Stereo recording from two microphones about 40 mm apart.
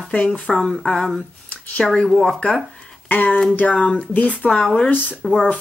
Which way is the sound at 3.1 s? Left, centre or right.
Left.